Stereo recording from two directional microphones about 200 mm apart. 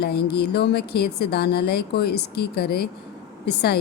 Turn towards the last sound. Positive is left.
turn(degrees=55)  # may be behind; listen again after turning